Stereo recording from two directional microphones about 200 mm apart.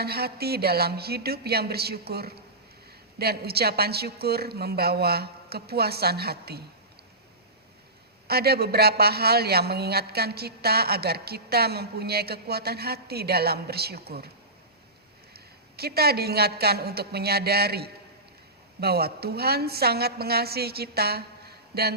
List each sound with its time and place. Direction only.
0.0 s a man's voice: 50° right (ahead or behind)
8.3 s a man's voice: 50° right (ahead or behind)
15.3 s a man's voice: 50° right (ahead or behind)